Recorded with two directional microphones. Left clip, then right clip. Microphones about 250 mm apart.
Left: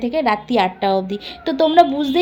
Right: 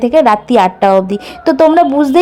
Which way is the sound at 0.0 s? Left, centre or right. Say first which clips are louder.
Right 10 dB; right.